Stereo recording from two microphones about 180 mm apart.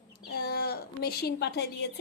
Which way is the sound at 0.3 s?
65° left (ahead or behind).